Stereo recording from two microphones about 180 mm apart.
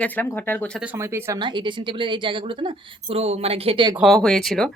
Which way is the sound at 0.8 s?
10° right (ahead or behind).